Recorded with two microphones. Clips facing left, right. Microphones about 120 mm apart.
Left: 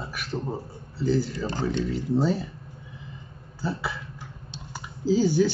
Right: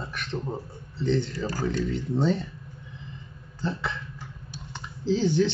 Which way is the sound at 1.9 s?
5° left (ahead or behind).